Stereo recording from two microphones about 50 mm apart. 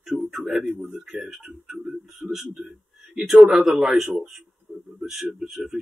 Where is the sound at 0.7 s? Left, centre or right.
Right.